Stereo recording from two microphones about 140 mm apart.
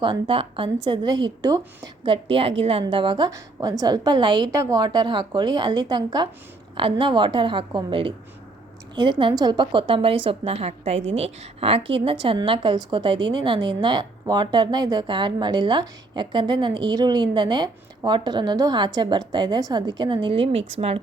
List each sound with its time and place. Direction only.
0.0 s a woman's voice: 40° right (ahead or behind)
2.0 s a woman's voice: 40° right (ahead or behind)